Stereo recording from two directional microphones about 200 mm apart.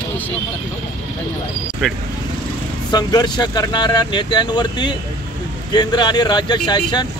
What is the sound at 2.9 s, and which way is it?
Speech, 20° left (ahead or behind).